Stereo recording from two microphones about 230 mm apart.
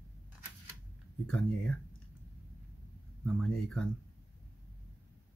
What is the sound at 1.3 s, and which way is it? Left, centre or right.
Speech, centre.